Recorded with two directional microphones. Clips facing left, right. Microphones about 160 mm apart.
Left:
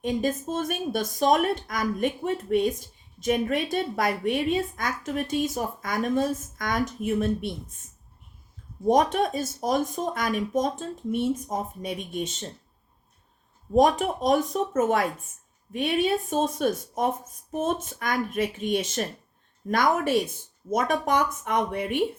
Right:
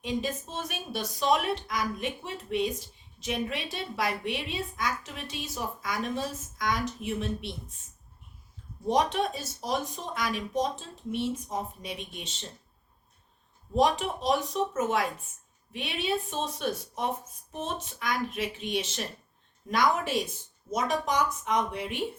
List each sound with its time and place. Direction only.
0.0 s a woman's voice: 50° left (ahead or behind)
8.9 s a woman's voice: 45° left (ahead or behind)
13.7 s a woman's voice: 45° left (ahead or behind)